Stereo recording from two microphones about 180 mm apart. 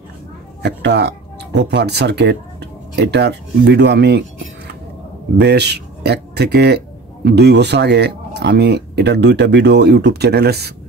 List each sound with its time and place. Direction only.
0.6 s speech: 70° right (ahead or behind)
5.4 s speech: 65° right (ahead or behind)